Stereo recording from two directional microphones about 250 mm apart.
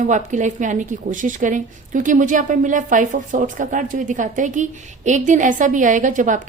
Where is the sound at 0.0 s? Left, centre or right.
Right.